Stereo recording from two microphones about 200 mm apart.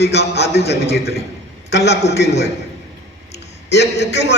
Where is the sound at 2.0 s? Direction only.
35° left (ahead or behind).